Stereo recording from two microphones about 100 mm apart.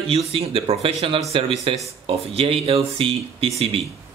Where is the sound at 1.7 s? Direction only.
60° right (ahead or behind).